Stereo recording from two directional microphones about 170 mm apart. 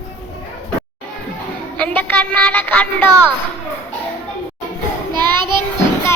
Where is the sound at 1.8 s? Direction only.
10° left (ahead or behind).